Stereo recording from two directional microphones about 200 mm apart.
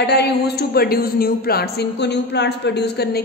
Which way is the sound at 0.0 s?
55° left (ahead or behind).